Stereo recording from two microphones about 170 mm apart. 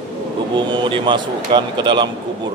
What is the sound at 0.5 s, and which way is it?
A man's voice, 30° right (ahead or behind).